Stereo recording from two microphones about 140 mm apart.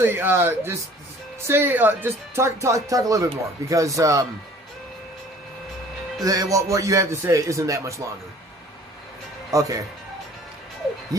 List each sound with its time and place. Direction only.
0.0 s speech: 15° right (ahead or behind)
6.2 s speech: 25° right (ahead or behind)
9.5 s speech: 25° right (ahead or behind)